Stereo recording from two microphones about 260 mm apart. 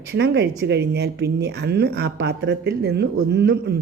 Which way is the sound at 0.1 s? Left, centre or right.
Right.